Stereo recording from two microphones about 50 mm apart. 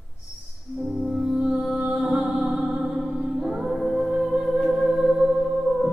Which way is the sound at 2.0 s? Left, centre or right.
Centre.